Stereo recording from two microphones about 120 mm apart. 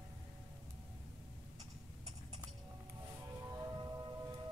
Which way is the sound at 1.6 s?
60° right (ahead or behind).